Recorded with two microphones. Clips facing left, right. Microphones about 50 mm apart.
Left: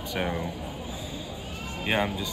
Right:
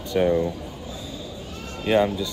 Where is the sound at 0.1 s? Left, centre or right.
Centre.